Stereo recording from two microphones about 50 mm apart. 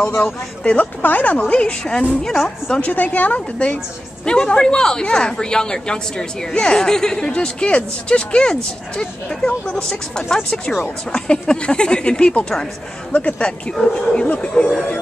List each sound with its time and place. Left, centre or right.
0.2 s speech: left
1.4 s speech: left
2.0 s a woman's voice: centre
2.8 s a woman's voice: left